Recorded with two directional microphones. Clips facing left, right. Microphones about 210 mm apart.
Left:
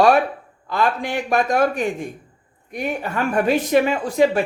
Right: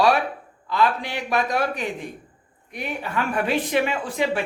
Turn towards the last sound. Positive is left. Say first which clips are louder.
# left 7 dB
turn(degrees=40)  # may be behind; listen again after turning